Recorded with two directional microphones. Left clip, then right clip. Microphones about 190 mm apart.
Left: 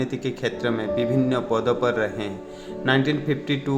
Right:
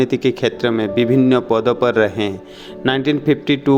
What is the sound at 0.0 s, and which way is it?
Speech, 45° right (ahead or behind).